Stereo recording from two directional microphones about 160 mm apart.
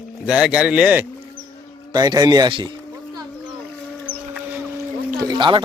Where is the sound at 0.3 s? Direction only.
5° right (ahead or behind).